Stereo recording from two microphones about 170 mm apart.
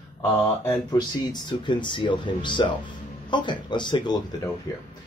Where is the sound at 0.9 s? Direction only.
25° left (ahead or behind).